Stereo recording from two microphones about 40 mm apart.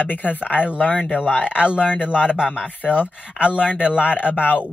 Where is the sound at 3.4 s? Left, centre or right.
Left.